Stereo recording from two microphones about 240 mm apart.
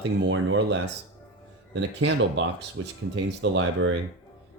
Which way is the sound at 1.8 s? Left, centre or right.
Right.